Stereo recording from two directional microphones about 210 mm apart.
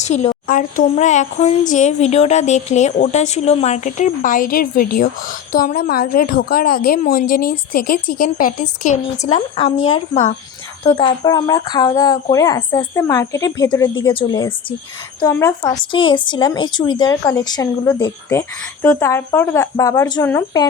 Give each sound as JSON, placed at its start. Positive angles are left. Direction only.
{"t": 0.0, "sound": "a woman's voice", "side_deg": 30}